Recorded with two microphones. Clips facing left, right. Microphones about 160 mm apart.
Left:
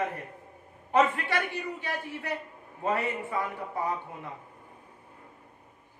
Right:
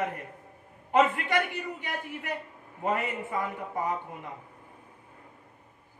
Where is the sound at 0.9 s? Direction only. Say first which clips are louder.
Right 1 dB; 15° right (ahead or behind).